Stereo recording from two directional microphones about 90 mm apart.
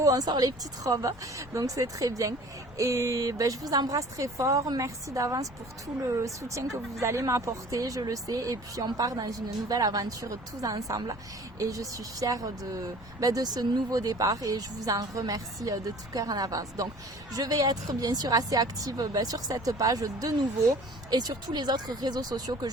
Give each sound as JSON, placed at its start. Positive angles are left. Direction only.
{"t": 0.0, "sound": "speech", "side_deg": -40}